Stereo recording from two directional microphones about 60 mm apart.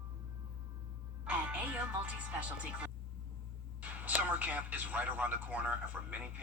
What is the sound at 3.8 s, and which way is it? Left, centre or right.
A man's voice, right.